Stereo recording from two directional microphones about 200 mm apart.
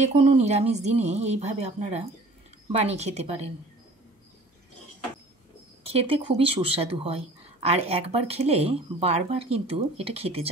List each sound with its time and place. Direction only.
0.0 s speech: 35° right (ahead or behind)
5.9 s speech: 30° right (ahead or behind)